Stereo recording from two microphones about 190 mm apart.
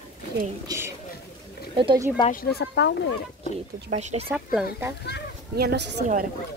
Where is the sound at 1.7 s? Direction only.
25° right (ahead or behind).